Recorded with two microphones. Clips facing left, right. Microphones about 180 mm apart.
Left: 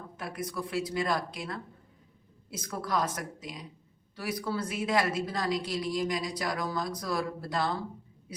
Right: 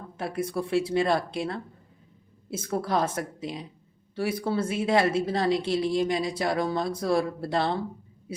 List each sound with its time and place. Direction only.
0.2 s speech: 30° right (ahead or behind)